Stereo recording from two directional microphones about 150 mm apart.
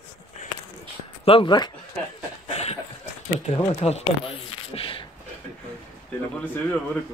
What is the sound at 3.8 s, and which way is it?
Speech, 45° left (ahead or behind).